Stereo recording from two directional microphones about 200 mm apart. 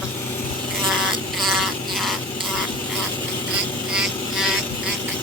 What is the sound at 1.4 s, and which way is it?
Insect, centre (ahead or behind).